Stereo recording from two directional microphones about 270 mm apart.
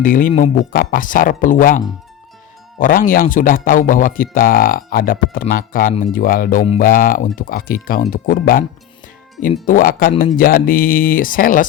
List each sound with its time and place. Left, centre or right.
0.0 s a man's voice: left
9.6 s a man's voice: left